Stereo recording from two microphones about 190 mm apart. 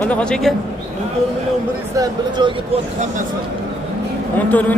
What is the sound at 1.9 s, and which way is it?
Speech, 20° right (ahead or behind).